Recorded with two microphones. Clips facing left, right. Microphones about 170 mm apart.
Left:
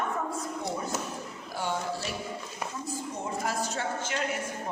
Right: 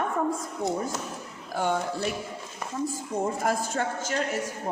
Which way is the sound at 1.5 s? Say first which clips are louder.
Right 5 dB; 55° right (ahead or behind).